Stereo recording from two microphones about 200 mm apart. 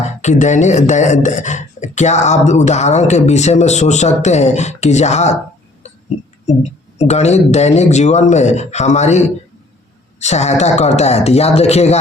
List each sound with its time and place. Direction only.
0.2 s speech: 35° left (ahead or behind)
6.4 s speech: 35° left (ahead or behind)